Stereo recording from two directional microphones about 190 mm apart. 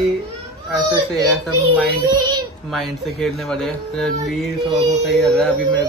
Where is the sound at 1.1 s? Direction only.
Centre (ahead or behind).